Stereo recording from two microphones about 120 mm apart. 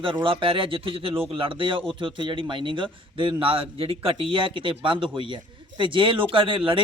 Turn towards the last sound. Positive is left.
turn(degrees=-45)  # may be behind; listen again after turning